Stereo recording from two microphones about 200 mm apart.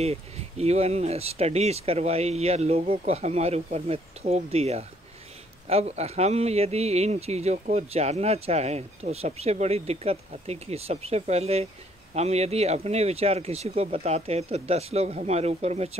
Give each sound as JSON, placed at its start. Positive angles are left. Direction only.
{"t": 0.0, "sound": "speech", "side_deg": -30}